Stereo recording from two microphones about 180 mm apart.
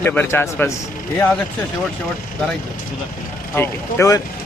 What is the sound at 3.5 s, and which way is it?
Speech, 15° left (ahead or behind).